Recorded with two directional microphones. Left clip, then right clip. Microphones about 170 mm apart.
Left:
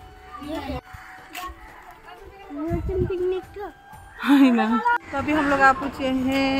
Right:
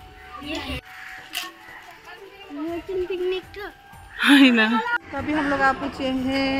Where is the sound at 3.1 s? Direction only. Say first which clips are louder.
Left 1 dB; 45° left (ahead or behind).